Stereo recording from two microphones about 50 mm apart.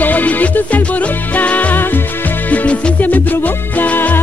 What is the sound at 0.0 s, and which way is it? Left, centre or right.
Music, left.